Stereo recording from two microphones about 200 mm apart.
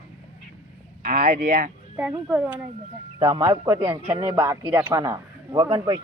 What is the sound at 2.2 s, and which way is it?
Speech, 10° right (ahead or behind).